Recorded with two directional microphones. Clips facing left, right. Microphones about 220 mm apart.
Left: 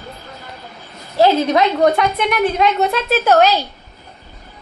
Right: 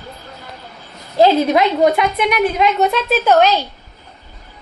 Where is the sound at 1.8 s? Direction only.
5° right (ahead or behind).